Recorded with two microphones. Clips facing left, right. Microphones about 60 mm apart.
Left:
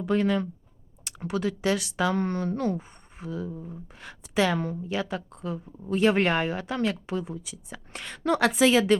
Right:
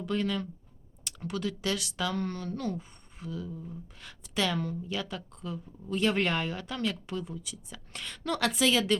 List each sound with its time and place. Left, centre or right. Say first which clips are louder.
0.0 s speech: left 6 dB; left